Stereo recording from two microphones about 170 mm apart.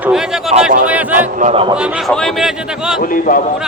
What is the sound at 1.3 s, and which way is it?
Speech, 45° right (ahead or behind).